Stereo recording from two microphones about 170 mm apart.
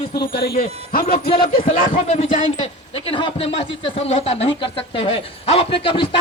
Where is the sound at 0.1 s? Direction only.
70° left (ahead or behind).